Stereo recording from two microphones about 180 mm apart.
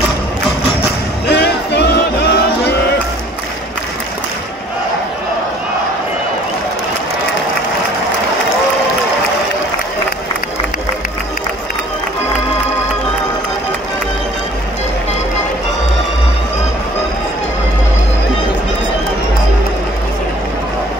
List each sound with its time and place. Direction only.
1.2 s music: 70° left (ahead or behind)